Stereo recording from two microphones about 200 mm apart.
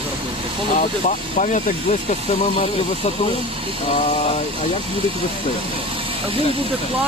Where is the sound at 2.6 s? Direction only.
30° left (ahead or behind).